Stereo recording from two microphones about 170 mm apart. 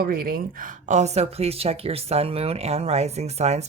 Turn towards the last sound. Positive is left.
turn(degrees=-40)  # may be behind; listen again after turning